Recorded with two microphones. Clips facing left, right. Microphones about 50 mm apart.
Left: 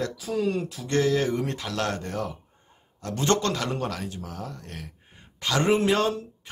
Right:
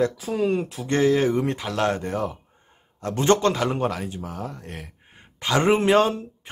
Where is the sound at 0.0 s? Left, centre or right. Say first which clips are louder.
Right 4 dB; right.